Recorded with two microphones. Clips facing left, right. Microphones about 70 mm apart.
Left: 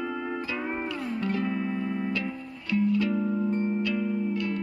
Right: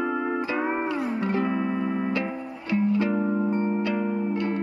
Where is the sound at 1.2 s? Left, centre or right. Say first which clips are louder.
Right 1 dB; right.